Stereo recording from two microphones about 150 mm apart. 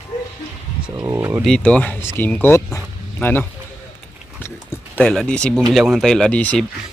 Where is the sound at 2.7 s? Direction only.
15° left (ahead or behind).